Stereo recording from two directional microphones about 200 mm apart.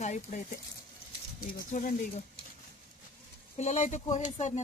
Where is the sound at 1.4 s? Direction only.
40° left (ahead or behind).